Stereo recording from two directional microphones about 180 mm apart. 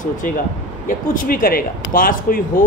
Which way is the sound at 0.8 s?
50° left (ahead or behind).